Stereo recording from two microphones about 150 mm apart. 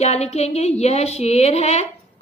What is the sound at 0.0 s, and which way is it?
A woman's voice, 45° left (ahead or behind).